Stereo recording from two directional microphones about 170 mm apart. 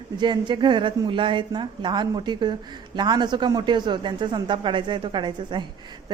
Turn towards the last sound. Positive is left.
turn(degrees=-30)  # may be behind; listen again after turning